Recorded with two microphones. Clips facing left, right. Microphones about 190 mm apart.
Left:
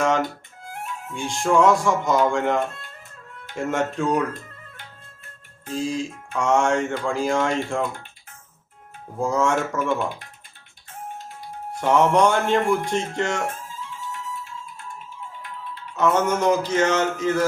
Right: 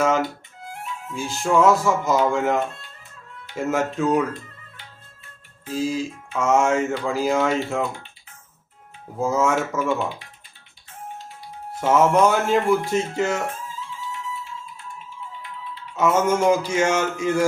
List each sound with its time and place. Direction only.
0.0 s music: 5° right (ahead or behind)
1.1 s speech: 5° right (ahead or behind)
5.6 s speech: 5° right (ahead or behind)
9.1 s speech: 5° right (ahead or behind)
11.8 s speech: 5° right (ahead or behind)
16.0 s a sound: 10° right (ahead or behind)